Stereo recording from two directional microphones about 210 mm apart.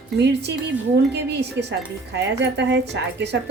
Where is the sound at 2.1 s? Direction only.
55° right (ahead or behind).